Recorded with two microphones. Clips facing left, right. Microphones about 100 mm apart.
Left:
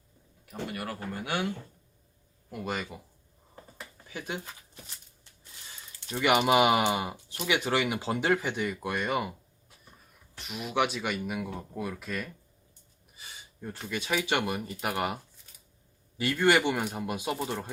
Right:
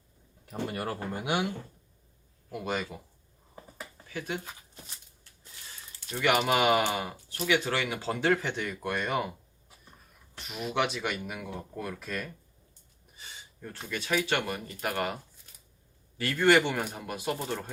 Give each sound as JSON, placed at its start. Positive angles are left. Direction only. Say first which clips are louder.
{"t": 0.7, "sound": "speech", "louder": "right 1 dB", "side_deg": -30}
{"t": 2.5, "sound": "speech", "louder": "right 1 dB", "side_deg": 0}
{"t": 6.1, "sound": "speech", "louder": "left 2 dB", "side_deg": 15}
{"t": 13.1, "sound": "a sound", "louder": "left 1 dB", "side_deg": 5}
{"t": 13.7, "sound": "speech", "louder": "even", "side_deg": 15}
{"t": 16.2, "sound": "speech", "louder": "right 1 dB", "side_deg": 5}